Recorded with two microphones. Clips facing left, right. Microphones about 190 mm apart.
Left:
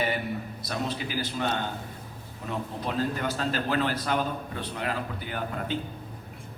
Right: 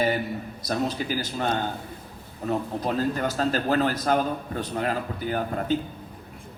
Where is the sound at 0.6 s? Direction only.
40° right (ahead or behind).